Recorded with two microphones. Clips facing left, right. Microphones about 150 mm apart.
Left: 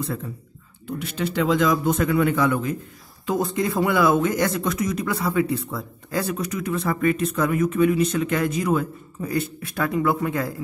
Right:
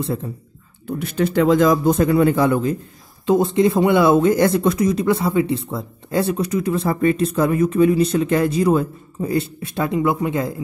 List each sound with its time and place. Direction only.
0.0 s speech: 30° right (ahead or behind)
0.8 s a man's voice: 50° right (ahead or behind); by 10.6 s 20° right (ahead or behind)